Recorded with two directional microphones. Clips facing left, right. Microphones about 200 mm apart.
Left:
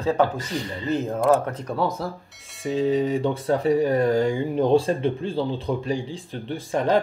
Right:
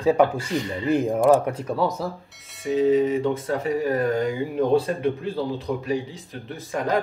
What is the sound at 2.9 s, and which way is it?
Speech, 30° left (ahead or behind).